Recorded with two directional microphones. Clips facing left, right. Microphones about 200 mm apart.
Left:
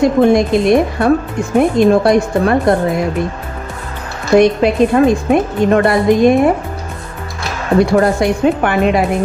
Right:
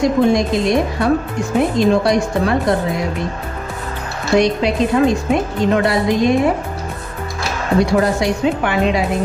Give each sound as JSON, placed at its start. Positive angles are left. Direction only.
{"t": 0.0, "sound": "a woman's voice", "side_deg": 55}
{"t": 4.4, "sound": "a woman's voice", "side_deg": 50}
{"t": 7.8, "sound": "a woman's voice", "side_deg": 55}